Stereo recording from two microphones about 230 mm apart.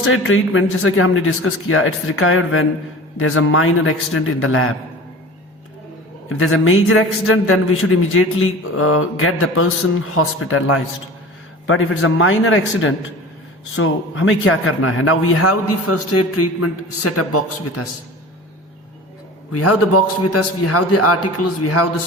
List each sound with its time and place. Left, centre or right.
0.0 s a man's voice: left
6.2 s a man's voice: left
19.5 s a man's voice: left